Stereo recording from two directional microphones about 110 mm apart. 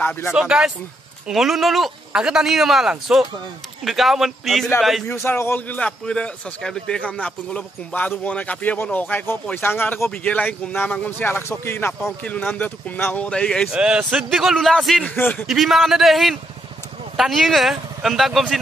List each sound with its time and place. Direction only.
0.0 s speech: 20° left (ahead or behind)
0.3 s speech: 5° right (ahead or behind)
5.0 s a man's voice: 25° left (ahead or behind); by 13.7 s 5° left (ahead or behind)
13.7 s speech: 5° right (ahead or behind)
15.0 s speech: 20° left (ahead or behind)
15.4 s speech: centre (ahead or behind)